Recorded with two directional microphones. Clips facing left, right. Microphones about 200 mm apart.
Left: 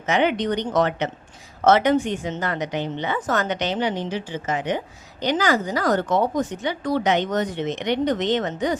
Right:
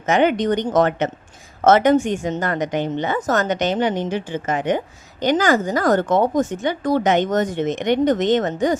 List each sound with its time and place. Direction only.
0.0 s speech: 45° right (ahead or behind)